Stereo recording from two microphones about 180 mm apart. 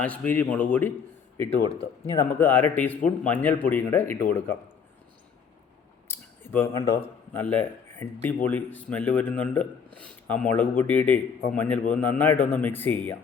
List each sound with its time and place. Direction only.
0.0 s a man's voice: 5° left (ahead or behind)
1.5 s speech: 35° left (ahead or behind)
2.1 s a man's voice: 10° left (ahead or behind)
6.1 s a sound: 10° left (ahead or behind)
6.7 s a man's voice: 15° left (ahead or behind)